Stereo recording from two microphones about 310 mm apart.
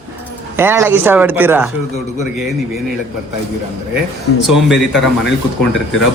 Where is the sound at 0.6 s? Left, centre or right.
Centre.